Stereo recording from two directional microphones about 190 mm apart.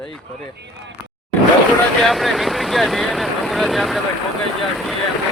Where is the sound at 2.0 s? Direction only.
Centre (ahead or behind).